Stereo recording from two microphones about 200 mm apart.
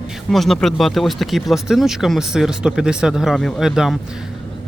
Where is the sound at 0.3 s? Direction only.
Centre (ahead or behind).